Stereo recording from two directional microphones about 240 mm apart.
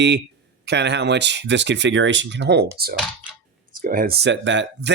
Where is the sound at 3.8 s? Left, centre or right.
Right.